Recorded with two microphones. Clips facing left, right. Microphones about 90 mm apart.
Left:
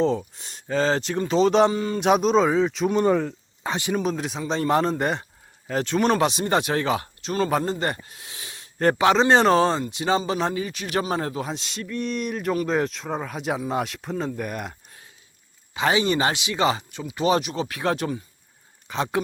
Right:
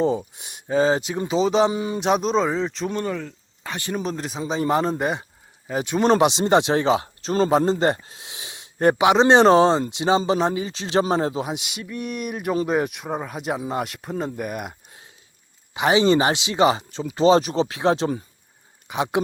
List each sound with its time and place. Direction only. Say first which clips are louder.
0.0 s a man's voice: right 1 dB; 10° right (ahead or behind)
1.7 s speech: even; 15° right (ahead or behind)
2.0 s a man's voice: left 2 dB; centre (ahead or behind)
3.6 s speech: left 4 dB; 25° left (ahead or behind)
3.9 s a man's voice: right 1 dB; centre (ahead or behind)
15.7 s speech: right 4 dB; 20° right (ahead or behind)